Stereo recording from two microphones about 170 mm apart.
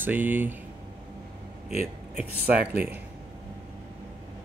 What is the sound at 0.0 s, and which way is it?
Speech, 10° right (ahead or behind).